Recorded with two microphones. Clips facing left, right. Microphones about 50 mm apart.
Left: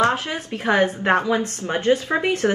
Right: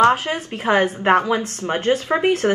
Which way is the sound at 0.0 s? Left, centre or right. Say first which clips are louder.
Right 4 dB; right.